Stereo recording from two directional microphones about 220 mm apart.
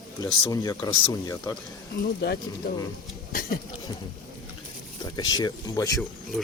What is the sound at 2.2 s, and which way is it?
Speech, 50° left (ahead or behind).